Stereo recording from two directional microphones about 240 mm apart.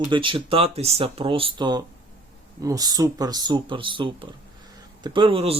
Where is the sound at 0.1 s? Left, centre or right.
Right.